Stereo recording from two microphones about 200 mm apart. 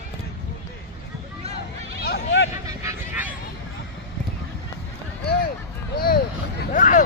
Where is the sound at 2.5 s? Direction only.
15° right (ahead or behind).